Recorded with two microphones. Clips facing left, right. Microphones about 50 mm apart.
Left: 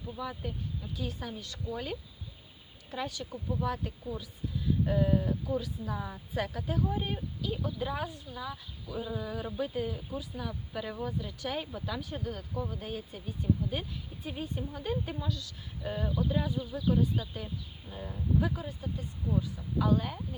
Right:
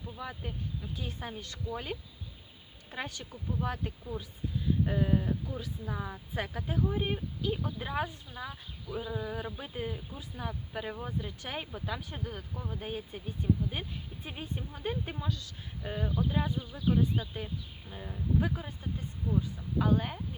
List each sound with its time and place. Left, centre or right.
0.2 s a woman's voice: right
1.7 s a woman's voice: right
2.9 s speech: right
4.9 s a woman's voice: right
15.8 s a woman's voice: right
17.8 s speech: centre
18.3 s speech: right